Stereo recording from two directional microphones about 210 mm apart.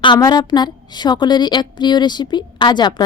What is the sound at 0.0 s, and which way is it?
A woman's voice, 20° left (ahead or behind).